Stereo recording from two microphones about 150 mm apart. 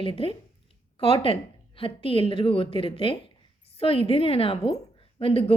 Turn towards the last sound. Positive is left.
turn(degrees=40)  # may be behind; listen again after turning